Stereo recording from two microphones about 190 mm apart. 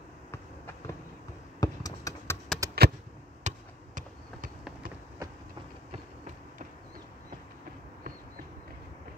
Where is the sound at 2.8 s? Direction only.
55° right (ahead or behind).